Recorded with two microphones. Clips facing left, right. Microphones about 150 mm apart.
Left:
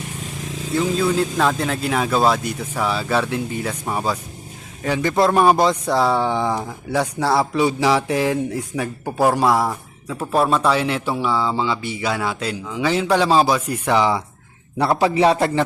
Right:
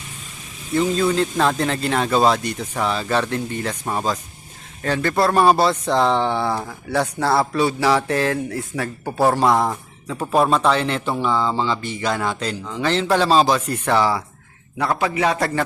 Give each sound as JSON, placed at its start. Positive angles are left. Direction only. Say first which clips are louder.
{"t": 0.7, "sound": "a man's voice", "louder": "right 1 dB", "side_deg": 0}
{"t": 14.8, "sound": "a man's voice", "louder": "left 4 dB", "side_deg": 30}